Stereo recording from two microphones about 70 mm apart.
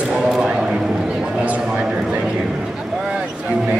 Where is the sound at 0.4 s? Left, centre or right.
Centre.